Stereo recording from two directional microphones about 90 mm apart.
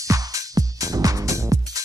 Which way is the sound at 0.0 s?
40° right (ahead or behind).